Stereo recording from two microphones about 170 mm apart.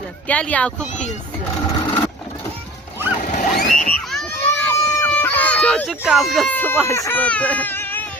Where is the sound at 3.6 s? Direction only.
50° left (ahead or behind).